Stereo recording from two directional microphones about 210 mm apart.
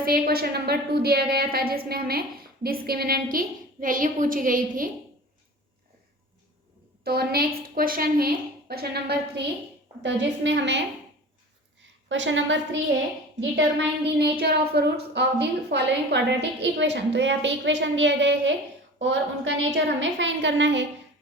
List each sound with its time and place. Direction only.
0.0 s a woman's voice: 45° right (ahead or behind)
7.0 s a woman's voice: 50° right (ahead or behind)
12.0 s a woman's voice: 60° right (ahead or behind)
13.7 s a woman's voice: 55° right (ahead or behind)